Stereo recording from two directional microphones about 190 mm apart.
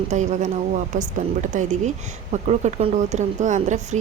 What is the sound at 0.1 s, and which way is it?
Speech, 40° right (ahead or behind).